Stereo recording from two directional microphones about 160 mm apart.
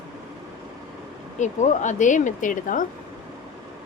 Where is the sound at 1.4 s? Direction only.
50° left (ahead or behind).